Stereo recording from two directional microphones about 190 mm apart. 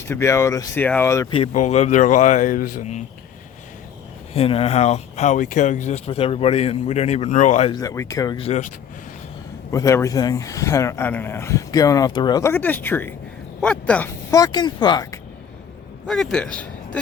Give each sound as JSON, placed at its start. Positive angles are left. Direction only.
{"t": 0.1, "sound": "speech", "side_deg": 15}
{"t": 1.5, "sound": "speech", "side_deg": 40}
{"t": 4.4, "sound": "speech", "side_deg": 30}
{"t": 7.7, "sound": "speech", "side_deg": 20}
{"t": 8.4, "sound": "speech", "side_deg": 35}
{"t": 9.7, "sound": "speech", "side_deg": 15}
{"t": 14.3, "sound": "speech", "side_deg": 20}
{"t": 16.0, "sound": "a man's voice", "side_deg": 0}